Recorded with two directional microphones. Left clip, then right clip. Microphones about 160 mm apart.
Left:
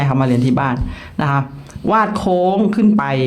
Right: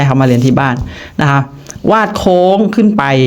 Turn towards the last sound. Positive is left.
turn(degrees=-35)  # may be behind; listen again after turning